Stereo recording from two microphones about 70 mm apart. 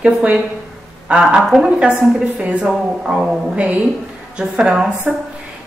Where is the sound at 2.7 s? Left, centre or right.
Centre.